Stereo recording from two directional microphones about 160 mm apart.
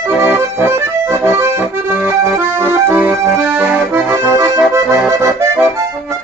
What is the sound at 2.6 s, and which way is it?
Accordion, 15° right (ahead or behind).